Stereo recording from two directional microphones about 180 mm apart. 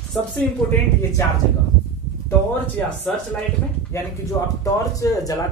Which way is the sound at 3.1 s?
Centre (ahead or behind).